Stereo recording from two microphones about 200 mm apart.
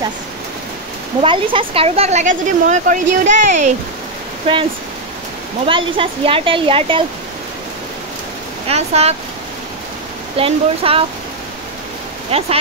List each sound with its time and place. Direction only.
1.2 s speech: 25° right (ahead or behind)
4.5 s speech: 25° right (ahead or behind)
5.7 s speech: 25° right (ahead or behind)
8.6 s speech: 30° right (ahead or behind)
10.3 s speech: 30° right (ahead or behind)
12.3 s speech: 30° right (ahead or behind)